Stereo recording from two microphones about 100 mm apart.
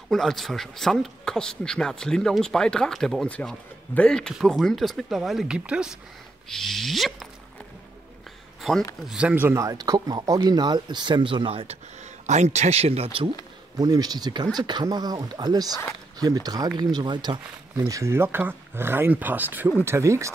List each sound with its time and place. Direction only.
0.1 s speech: 5° left (ahead or behind)
4.3 s speech: centre (ahead or behind)
6.5 s speech: 5° left (ahead or behind)
9.3 s speech: 20° right (ahead or behind)
9.6 s speech: 35° right (ahead or behind); by 13.3 s 70° right (ahead or behind)
13.7 s speech: 40° right (ahead or behind)
17.7 s speech: 30° right (ahead or behind)